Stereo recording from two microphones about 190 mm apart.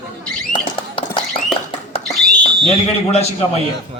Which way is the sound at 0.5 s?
25° left (ahead or behind).